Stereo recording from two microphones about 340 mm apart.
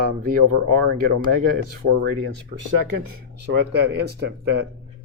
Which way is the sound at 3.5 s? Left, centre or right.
Right.